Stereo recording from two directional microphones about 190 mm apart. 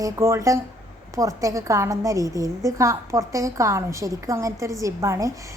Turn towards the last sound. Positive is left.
turn(degrees=-15)  # may be behind; listen again after turning